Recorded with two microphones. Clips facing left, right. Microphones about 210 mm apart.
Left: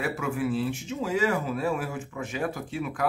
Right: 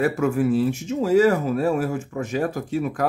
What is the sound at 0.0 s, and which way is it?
Speech, 45° right (ahead or behind).